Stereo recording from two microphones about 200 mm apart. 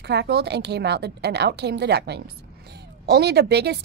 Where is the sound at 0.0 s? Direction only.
55° right (ahead or behind).